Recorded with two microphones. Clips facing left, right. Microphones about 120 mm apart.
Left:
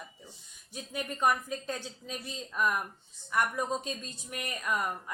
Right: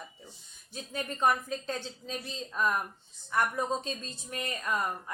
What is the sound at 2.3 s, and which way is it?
A woman's voice, 25° right (ahead or behind).